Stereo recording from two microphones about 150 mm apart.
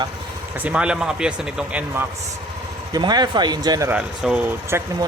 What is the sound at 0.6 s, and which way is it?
Speech, 5° right (ahead or behind).